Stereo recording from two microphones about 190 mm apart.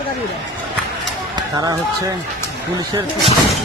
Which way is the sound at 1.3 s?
20° right (ahead or behind).